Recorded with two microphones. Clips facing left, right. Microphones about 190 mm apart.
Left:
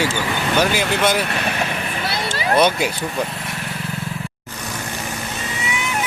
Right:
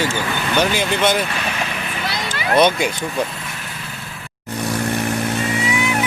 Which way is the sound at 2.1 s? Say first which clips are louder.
Left 2 dB; 30° left (ahead or behind).